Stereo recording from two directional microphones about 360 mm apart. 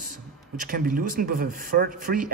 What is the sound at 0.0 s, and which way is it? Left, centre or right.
Speech, right.